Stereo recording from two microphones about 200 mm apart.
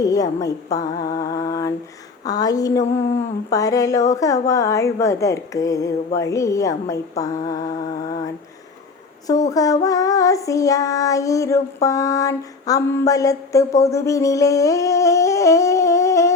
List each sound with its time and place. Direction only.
0.0 s child singing: 15° left (ahead or behind)